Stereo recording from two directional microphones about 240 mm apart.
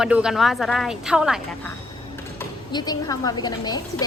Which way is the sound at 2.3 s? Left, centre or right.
Centre.